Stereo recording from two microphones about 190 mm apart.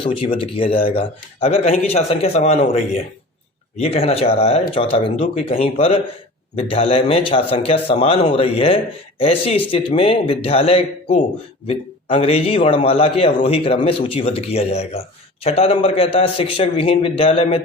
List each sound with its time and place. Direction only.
0.0 s speech: 30° left (ahead or behind)